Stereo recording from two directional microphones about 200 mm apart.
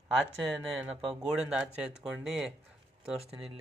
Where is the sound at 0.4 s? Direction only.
5° right (ahead or behind).